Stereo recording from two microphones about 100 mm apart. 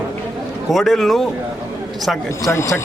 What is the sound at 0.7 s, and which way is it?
Speech, 5° left (ahead or behind).